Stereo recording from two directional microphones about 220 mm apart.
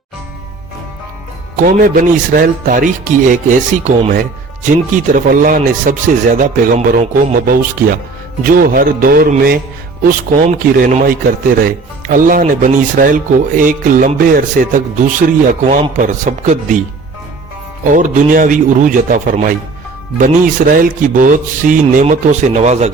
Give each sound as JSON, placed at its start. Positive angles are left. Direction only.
{"t": 1.5, "sound": "speech", "side_deg": -40}
{"t": 17.9, "sound": "speech", "side_deg": -35}